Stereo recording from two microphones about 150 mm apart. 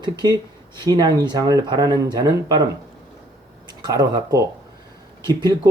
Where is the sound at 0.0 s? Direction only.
30° right (ahead or behind).